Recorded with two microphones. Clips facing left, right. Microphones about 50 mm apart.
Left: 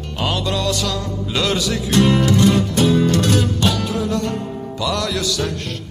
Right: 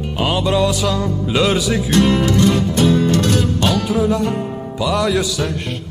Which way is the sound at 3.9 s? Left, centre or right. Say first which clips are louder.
Right 4 dB; centre.